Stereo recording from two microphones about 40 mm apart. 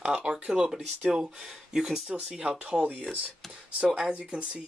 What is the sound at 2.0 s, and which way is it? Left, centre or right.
Speech, right.